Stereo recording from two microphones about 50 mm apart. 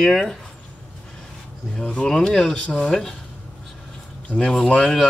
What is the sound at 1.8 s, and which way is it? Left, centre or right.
Speech, left.